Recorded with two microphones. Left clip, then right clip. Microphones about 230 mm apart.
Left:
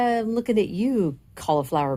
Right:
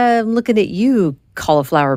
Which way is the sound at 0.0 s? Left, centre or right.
Right.